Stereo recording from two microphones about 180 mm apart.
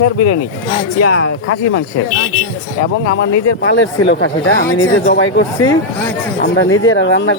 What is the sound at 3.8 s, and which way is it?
Speech, 90° left.